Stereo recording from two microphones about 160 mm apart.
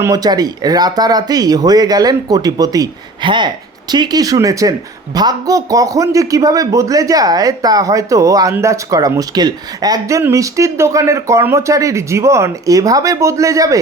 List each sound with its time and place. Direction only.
0.0 s a man's voice: 25° right (ahead or behind)